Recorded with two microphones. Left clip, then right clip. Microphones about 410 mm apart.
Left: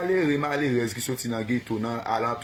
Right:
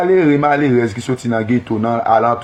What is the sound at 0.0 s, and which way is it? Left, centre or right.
Speech, left.